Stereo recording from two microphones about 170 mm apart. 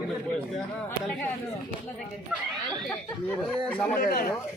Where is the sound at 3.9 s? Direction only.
55° left (ahead or behind).